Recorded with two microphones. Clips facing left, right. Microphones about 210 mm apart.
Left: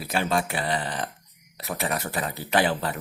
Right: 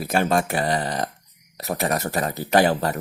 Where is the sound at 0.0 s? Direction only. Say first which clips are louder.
Right 5 dB; 45° right (ahead or behind).